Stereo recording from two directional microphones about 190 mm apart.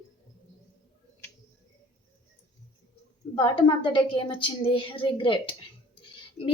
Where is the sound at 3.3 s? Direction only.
25° left (ahead or behind).